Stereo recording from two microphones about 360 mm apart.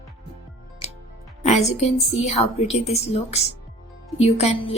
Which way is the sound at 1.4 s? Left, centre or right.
Centre.